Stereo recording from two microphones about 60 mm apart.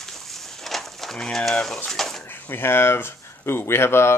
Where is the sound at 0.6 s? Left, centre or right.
Centre.